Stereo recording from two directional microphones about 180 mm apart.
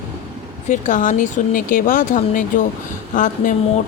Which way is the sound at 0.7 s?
45° left (ahead or behind).